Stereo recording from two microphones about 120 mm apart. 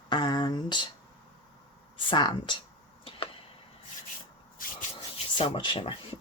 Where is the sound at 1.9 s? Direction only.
40° left (ahead or behind).